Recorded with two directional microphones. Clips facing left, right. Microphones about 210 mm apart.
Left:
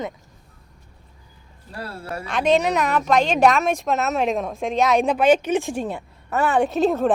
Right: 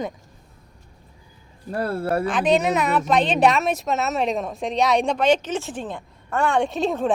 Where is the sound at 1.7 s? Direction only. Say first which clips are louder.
Right 9 dB; 55° right (ahead or behind).